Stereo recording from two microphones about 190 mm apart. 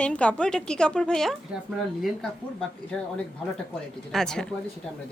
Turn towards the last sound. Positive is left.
turn(degrees=5)  # may be behind; listen again after turning